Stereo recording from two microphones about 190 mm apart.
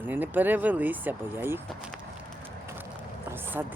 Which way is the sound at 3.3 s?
10° right (ahead or behind).